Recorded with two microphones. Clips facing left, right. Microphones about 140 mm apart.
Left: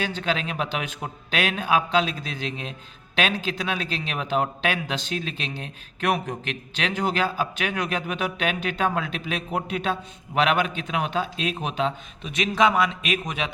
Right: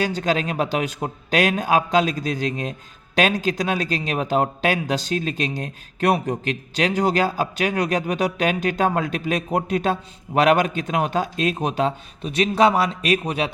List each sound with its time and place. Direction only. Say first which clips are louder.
0.0 s a man's voice: right 5 dB; 40° right (ahead or behind)